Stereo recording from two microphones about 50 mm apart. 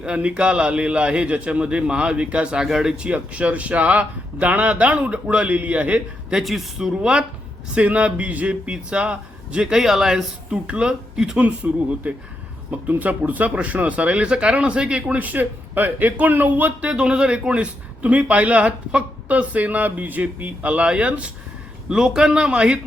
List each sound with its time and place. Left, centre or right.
0.0 s a man's voice: right
2.6 s a man's voice: centre
3.0 s a man's voice: right
6.4 s a man's voice: centre
7.8 s a man's voice: right
9.7 s a man's voice: centre
15.2 s speech: right
16.9 s a man's voice: centre
21.8 s a man's voice: centre